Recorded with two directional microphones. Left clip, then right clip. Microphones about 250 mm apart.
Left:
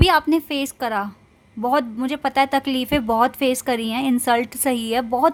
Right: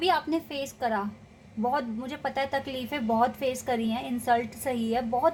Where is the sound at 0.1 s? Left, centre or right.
Left.